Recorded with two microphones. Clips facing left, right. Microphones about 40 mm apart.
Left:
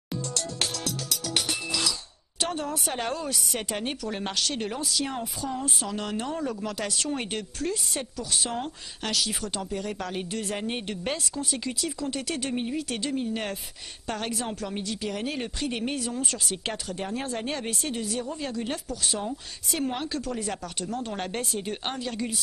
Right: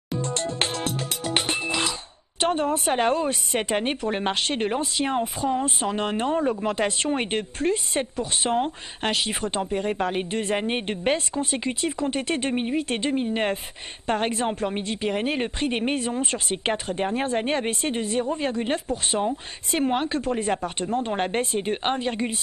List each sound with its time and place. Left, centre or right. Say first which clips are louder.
0.2 s music: right 6 dB; right
2.4 s a woman's voice: right 7 dB; right